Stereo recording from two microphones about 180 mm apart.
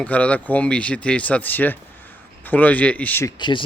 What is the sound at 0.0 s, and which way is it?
Speech, 5° left (ahead or behind).